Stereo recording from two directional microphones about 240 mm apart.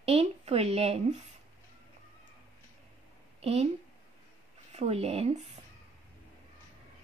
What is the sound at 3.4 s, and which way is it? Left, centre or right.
Speech, right.